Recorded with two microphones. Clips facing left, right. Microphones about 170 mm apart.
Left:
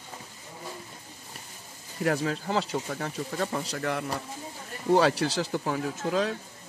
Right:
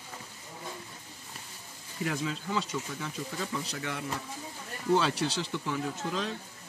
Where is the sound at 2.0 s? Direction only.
60° left (ahead or behind).